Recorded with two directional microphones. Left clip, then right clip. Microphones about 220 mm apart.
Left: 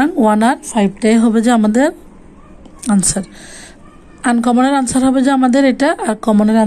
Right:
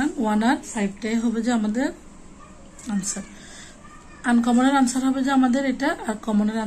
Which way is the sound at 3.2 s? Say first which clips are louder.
Left 13 dB; 40° left (ahead or behind).